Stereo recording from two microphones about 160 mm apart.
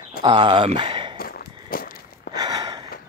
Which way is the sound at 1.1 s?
65° left (ahead or behind).